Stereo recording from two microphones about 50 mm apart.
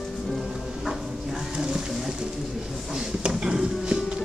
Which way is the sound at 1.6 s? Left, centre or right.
Centre.